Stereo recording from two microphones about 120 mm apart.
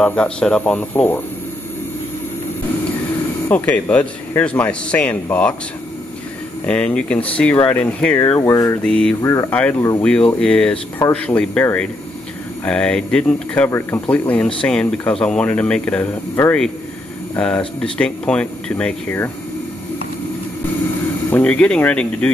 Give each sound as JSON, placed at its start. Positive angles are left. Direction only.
{"t": 0.0, "sound": "speech", "side_deg": 10}
{"t": 3.4, "sound": "speech", "side_deg": 15}
{"t": 6.6, "sound": "speech", "side_deg": 10}
{"t": 8.2, "sound": "speech", "side_deg": 35}
{"t": 8.8, "sound": "speech", "side_deg": 5}
{"t": 9.2, "sound": "speech", "side_deg": 25}
{"t": 9.5, "sound": "speech", "side_deg": 10}
{"t": 21.3, "sound": "speech", "side_deg": 10}